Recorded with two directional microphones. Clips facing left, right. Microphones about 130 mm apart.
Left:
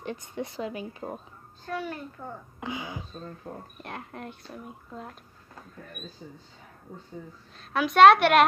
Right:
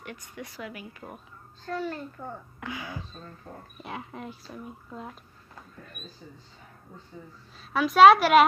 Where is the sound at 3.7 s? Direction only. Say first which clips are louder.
Right 1 dB; centre (ahead or behind).